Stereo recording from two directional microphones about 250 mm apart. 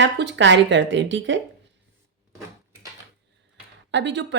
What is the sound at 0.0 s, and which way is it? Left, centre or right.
Speech, right.